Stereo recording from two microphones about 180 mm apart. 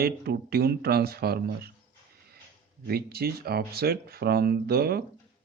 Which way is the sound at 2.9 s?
60° right (ahead or behind).